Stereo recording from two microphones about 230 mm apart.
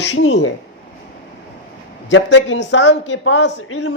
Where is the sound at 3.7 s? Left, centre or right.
Left.